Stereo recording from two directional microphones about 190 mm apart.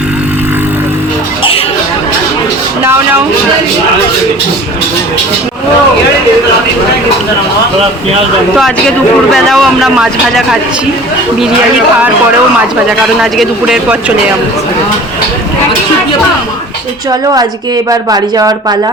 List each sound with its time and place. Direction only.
9.3 s speech: centre (ahead or behind)
13.1 s speech: centre (ahead or behind)
18.1 s speech: 20° right (ahead or behind)